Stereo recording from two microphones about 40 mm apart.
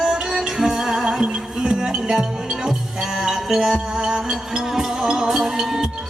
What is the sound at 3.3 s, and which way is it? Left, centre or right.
Music, centre.